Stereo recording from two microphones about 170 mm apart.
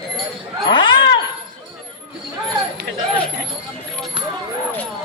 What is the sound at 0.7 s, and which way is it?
Speech, 30° left (ahead or behind).